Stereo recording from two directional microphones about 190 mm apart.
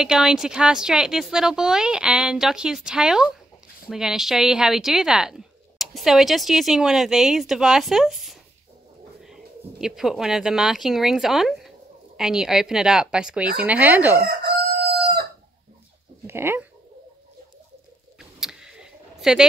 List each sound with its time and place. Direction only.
0.0 s speech: 5° right (ahead or behind)
14.2 s crowing: 55° right (ahead or behind)
16.3 s speech: 10° right (ahead or behind)
18.4 s a sound: 5° right (ahead or behind)